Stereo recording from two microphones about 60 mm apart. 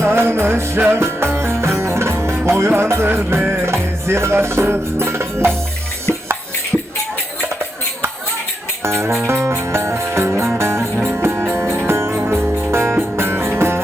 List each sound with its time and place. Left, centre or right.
0.0 s music: right
8.8 s music: right